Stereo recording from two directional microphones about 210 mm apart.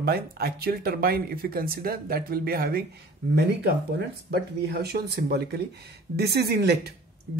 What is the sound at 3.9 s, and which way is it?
Speech, 50° right (ahead or behind).